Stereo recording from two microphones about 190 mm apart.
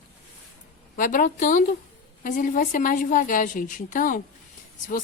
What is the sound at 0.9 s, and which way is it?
Speech, 45° left (ahead or behind).